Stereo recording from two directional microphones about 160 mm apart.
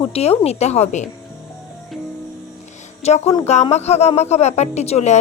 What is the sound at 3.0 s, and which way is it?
A woman's voice, 40° left (ahead or behind).